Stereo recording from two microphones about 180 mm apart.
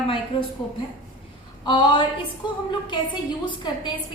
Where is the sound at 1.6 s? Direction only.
25° left (ahead or behind).